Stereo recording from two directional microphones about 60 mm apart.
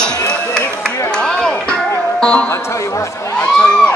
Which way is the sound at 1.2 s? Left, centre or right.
Centre.